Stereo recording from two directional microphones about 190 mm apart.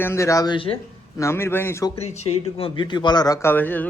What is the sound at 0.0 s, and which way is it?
Speech, 15° left (ahead or behind).